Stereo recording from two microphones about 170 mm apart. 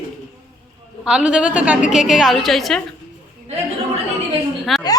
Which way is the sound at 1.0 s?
5° right (ahead or behind).